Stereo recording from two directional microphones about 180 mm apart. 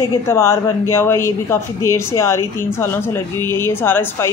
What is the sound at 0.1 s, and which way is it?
Speech, 15° left (ahead or behind).